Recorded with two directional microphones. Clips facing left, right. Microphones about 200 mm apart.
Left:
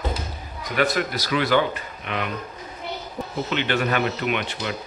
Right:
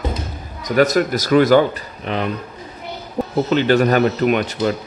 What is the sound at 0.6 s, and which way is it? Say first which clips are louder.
Speech: right 8 dB; 40° right (ahead or behind).